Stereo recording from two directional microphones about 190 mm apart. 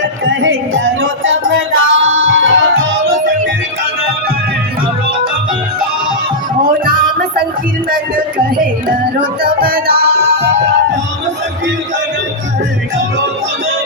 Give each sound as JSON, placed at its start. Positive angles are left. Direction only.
{"t": 0.0, "sound": "music", "side_deg": -85}
{"t": 6.7, "sound": "music", "side_deg": -45}